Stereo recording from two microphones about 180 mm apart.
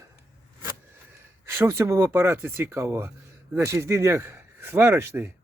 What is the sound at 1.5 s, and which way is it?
Speech, 15° right (ahead or behind).